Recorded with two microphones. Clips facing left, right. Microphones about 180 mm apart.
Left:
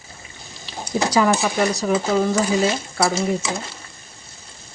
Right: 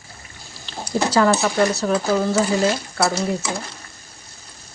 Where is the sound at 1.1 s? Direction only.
15° left (ahead or behind).